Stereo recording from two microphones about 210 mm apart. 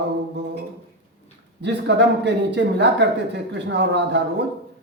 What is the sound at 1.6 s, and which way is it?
A man's voice, 55° right (ahead or behind).